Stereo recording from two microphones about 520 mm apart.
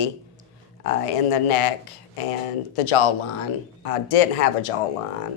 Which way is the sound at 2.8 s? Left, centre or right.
Left.